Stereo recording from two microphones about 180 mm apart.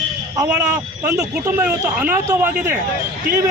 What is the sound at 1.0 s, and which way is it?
Speech, 10° right (ahead or behind).